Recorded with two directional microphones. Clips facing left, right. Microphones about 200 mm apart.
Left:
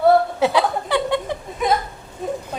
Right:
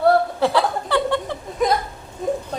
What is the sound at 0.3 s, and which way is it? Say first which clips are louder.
Chuckle: left 1 dB; 15° left (ahead or behind).